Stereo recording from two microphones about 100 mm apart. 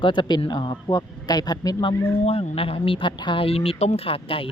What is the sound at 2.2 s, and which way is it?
Speech, 80° left.